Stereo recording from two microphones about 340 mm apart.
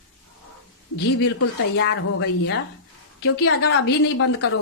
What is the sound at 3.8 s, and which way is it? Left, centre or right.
Speech, left.